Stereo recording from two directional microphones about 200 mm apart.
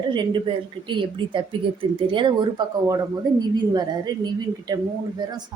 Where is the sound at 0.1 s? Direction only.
25° right (ahead or behind).